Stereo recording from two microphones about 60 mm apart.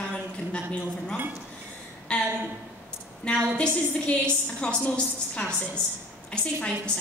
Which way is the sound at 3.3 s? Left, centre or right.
Centre.